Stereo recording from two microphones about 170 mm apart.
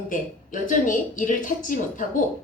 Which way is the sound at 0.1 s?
50° left (ahead or behind).